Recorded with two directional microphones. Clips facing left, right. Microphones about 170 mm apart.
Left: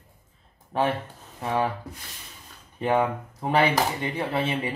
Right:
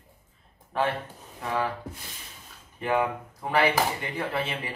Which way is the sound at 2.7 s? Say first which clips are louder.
Left 3 dB; 25° left (ahead or behind).